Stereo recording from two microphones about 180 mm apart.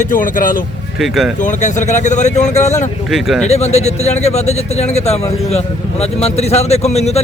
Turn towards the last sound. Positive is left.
turn(degrees=35)  # may be behind; listen again after turning